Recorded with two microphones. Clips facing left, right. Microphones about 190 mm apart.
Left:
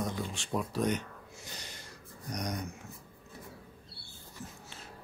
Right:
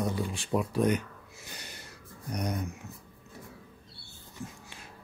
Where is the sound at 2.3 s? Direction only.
5° right (ahead or behind).